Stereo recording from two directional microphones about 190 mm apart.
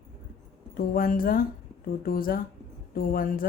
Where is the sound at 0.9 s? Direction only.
50° left (ahead or behind).